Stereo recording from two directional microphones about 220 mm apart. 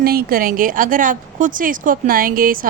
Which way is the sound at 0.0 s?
45° right (ahead or behind).